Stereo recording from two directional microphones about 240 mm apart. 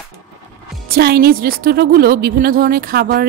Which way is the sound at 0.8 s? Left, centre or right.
Right.